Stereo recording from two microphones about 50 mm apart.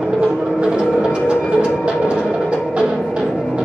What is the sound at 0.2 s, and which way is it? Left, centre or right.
Music, right.